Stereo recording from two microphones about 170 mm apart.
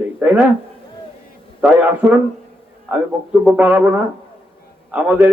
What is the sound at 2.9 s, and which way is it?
A man's voice, 10° right (ahead or behind).